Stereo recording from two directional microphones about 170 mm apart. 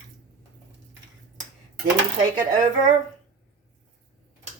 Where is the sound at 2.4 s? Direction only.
50° right (ahead or behind).